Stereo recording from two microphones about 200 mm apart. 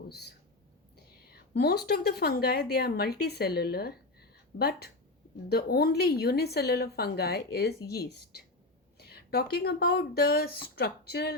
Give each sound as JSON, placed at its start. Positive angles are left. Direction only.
{"t": 0.1, "sound": "a woman's voice", "side_deg": 55}
{"t": 9.0, "sound": "speech", "side_deg": 50}